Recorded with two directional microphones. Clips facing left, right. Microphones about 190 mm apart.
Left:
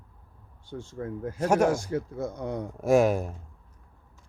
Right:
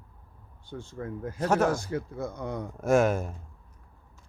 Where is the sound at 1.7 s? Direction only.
50° left (ahead or behind).